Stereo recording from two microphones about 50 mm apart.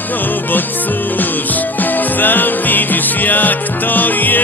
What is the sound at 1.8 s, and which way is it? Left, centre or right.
Music, left.